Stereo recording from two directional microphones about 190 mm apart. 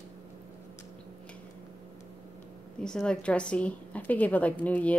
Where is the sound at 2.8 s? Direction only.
5° left (ahead or behind).